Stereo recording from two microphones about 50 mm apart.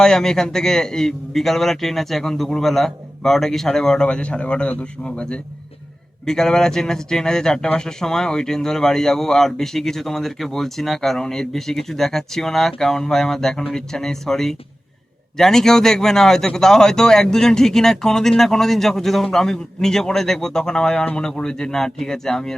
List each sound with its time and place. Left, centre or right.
0.0 s speech: centre
6.2 s speech: centre